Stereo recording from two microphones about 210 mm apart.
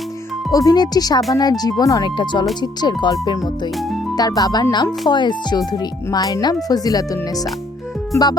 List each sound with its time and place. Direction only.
0.5 s speech: 15° left (ahead or behind)